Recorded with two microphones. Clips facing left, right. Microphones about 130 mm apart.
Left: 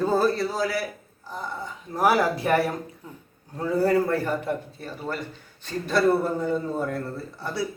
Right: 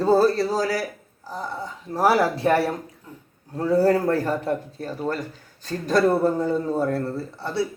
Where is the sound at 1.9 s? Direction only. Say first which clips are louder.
Right 2 dB; 30° right (ahead or behind).